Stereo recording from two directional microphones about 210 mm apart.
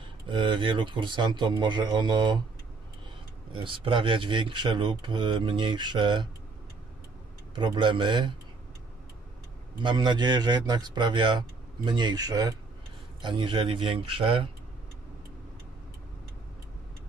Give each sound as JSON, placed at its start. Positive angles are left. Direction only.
{"t": 0.3, "sound": "a man's voice", "side_deg": -25}
{"t": 3.6, "sound": "a man's voice", "side_deg": -25}
{"t": 7.5, "sound": "a man's voice", "side_deg": -20}
{"t": 9.8, "sound": "a man's voice", "side_deg": -20}